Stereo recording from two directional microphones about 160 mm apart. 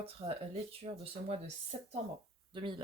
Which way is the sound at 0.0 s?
40° right (ahead or behind).